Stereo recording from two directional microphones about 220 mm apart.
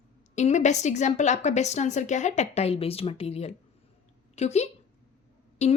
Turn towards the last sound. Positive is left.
turn(degrees=30)  # may be behind; listen again after turning